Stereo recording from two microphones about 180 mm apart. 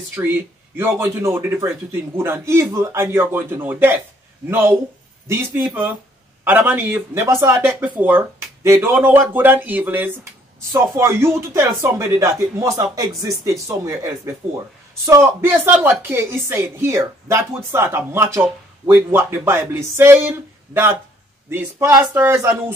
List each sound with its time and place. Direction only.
0.1 s a woman's voice: 10° right (ahead or behind)